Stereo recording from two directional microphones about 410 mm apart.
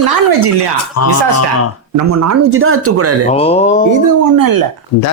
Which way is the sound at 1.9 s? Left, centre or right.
Right.